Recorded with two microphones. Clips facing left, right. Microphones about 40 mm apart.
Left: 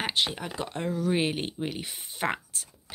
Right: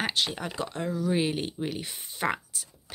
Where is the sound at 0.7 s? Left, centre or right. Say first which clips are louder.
Left 1 dB; left.